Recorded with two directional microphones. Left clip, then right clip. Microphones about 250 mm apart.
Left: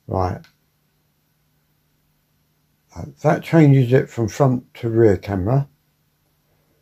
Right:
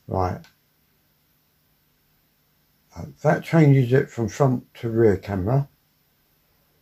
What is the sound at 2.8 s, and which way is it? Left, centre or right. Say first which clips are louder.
Speech: left 3 dB; left.